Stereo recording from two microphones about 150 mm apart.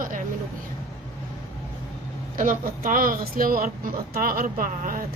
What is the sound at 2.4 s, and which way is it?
Speech, 60° right (ahead or behind).